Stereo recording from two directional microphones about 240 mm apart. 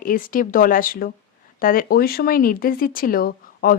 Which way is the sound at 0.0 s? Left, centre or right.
Left.